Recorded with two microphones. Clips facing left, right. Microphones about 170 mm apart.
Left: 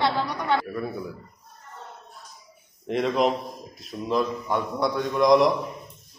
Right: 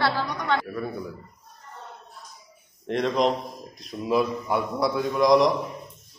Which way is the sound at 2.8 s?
Centre (ahead or behind).